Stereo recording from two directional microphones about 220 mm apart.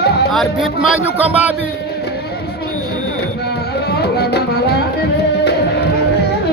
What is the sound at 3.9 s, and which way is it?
Music, 45° left (ahead or behind).